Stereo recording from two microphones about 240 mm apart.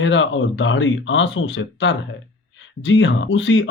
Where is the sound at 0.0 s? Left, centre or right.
Left.